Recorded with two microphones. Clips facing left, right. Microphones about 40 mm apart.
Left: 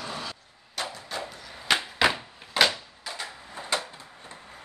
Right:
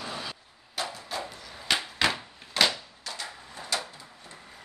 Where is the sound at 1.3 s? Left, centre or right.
Centre; by 4.3 s left.